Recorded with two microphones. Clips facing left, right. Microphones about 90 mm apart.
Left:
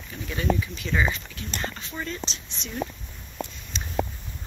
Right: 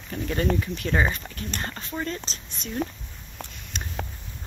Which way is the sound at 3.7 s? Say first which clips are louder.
Right 1 dB; 55° right (ahead or behind).